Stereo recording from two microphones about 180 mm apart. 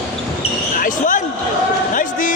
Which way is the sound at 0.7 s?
50° left (ahead or behind).